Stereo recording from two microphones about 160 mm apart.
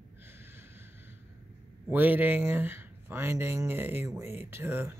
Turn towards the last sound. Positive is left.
turn(degrees=-15)  # may be behind; listen again after turning